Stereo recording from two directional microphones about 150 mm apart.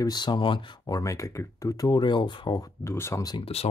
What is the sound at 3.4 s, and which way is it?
Speech, 45° left (ahead or behind).